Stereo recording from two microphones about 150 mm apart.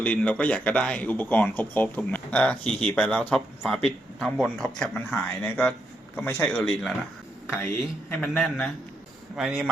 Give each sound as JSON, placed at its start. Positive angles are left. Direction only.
{"t": 0.0, "sound": "a man's voice", "side_deg": 10}